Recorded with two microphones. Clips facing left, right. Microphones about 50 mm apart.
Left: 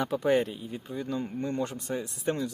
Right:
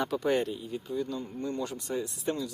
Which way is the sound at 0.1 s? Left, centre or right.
Left.